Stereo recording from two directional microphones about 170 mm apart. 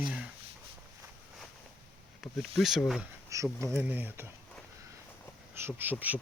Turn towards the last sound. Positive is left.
turn(degrees=-10)  # may be behind; listen again after turning